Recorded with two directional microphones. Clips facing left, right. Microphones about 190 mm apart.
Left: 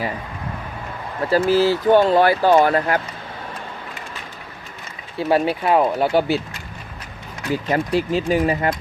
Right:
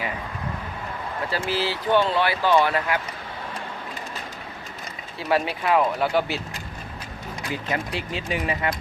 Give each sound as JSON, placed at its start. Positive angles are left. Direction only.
{"t": 1.3, "sound": "speech", "side_deg": 45}
{"t": 5.3, "sound": "speech", "side_deg": 30}
{"t": 7.5, "sound": "speech", "side_deg": 40}